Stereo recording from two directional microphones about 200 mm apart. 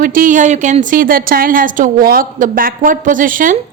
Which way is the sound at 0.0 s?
45° right (ahead or behind).